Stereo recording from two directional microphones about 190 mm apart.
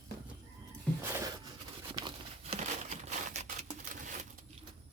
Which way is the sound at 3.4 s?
45° right (ahead or behind).